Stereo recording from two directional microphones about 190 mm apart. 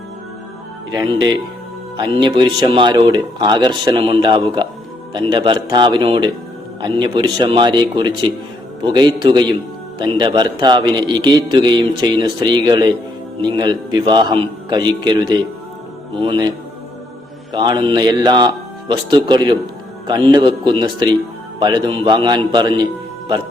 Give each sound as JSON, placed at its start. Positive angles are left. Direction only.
{"t": 0.9, "sound": "speech", "side_deg": -25}
{"t": 17.5, "sound": "speech", "side_deg": -25}